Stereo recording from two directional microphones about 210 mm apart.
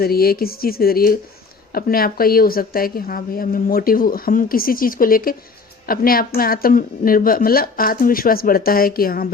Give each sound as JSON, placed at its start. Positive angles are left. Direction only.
{"t": 0.0, "sound": "speech", "side_deg": 45}